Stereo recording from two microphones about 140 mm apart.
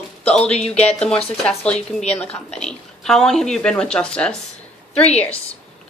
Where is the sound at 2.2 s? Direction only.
50° left (ahead or behind).